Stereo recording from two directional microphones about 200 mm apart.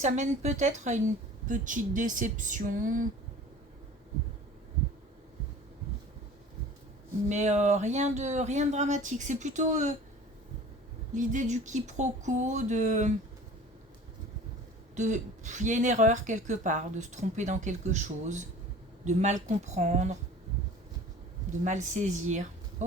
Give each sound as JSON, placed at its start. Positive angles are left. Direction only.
{"t": 0.0, "sound": "a woman's voice", "side_deg": -35}
{"t": 7.3, "sound": "a woman's voice", "side_deg": -35}
{"t": 11.1, "sound": "a woman's voice", "side_deg": -40}
{"t": 14.9, "sound": "a woman's voice", "side_deg": -35}
{"t": 21.6, "sound": "a woman's voice", "side_deg": -35}